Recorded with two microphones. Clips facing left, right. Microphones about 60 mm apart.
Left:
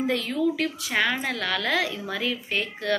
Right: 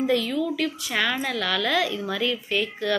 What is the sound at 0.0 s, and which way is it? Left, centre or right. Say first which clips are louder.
Speech: right 1 dB; left.